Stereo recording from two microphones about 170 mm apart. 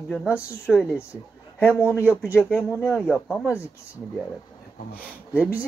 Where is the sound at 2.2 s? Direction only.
15° left (ahead or behind).